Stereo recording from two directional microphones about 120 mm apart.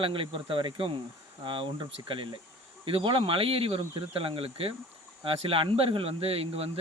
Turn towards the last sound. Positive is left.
turn(degrees=-55)  # may be behind; listen again after turning